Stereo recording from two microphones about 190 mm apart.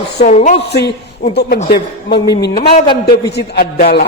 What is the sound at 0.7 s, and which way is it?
Speech, 60° left (ahead or behind).